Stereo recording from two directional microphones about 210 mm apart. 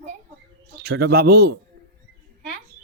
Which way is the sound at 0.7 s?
50° right (ahead or behind).